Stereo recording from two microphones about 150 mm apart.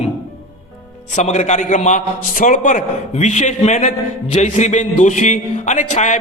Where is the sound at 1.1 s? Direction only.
55° left (ahead or behind).